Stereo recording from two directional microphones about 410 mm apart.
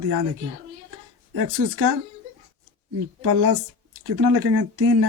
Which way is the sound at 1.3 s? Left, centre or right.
Right.